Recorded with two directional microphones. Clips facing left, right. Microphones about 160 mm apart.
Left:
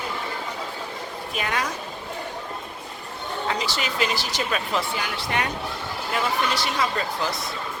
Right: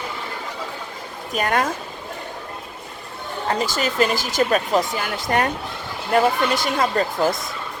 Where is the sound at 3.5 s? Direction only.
45° right (ahead or behind).